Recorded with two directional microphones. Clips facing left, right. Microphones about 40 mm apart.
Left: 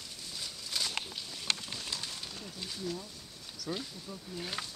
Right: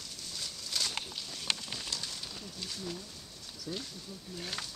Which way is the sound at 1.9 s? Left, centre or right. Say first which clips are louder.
Even; centre.